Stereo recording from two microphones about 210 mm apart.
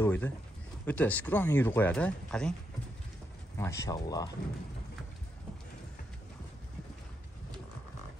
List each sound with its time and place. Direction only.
0.0 s a sound: 10° left (ahead or behind)
0.8 s speech: 5° left (ahead or behind)
3.5 s speech: 15° left (ahead or behind)